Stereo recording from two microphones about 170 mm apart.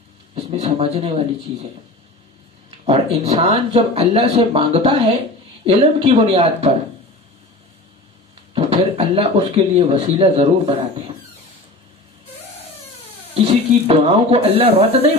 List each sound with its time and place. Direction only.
0.3 s speech: 35° right (ahead or behind)
2.6 s a sound: 35° right (ahead or behind)
3.2 s speech: 35° right (ahead or behind)
8.5 s speech: 35° right (ahead or behind)
13.3 s speech: 35° right (ahead or behind)